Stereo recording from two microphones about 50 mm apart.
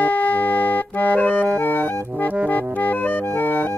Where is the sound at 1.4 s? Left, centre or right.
Left.